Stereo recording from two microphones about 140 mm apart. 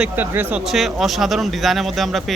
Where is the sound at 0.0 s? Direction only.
10° right (ahead or behind).